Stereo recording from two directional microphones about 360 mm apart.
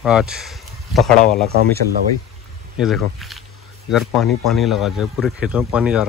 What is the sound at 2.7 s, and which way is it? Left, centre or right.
Speech, centre.